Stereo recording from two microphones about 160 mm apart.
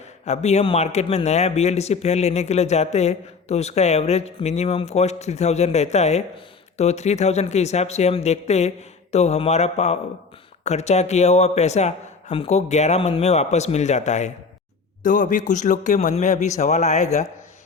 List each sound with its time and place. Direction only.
0.3 s a man's voice: 45° left (ahead or behind)